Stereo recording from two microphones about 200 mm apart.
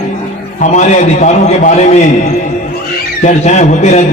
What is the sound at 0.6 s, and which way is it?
A man's voice, 40° left (ahead or behind).